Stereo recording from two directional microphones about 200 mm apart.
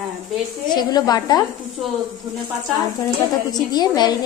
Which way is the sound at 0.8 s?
20° left (ahead or behind).